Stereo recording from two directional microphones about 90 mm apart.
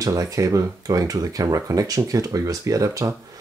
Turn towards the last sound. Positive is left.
turn(degrees=-35)  # may be behind; listen again after turning